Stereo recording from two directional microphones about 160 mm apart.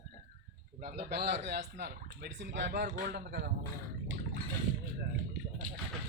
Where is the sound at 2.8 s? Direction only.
65° right (ahead or behind); by 3.4 s 80° right.